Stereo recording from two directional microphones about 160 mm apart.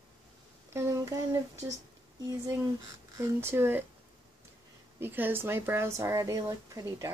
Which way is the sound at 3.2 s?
15° right (ahead or behind).